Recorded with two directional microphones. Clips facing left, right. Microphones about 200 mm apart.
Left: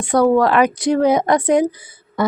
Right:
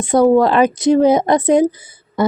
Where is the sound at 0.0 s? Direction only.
20° right (ahead or behind).